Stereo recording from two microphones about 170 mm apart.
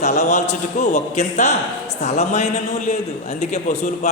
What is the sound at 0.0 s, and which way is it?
A man's voice, 45° left (ahead or behind).